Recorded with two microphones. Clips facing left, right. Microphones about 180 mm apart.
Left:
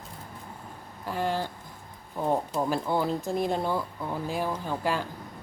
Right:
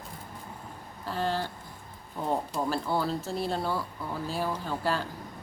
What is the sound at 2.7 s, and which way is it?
Speech, 15° left (ahead or behind).